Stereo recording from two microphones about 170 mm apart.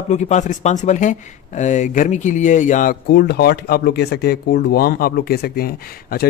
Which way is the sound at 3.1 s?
75° left (ahead or behind).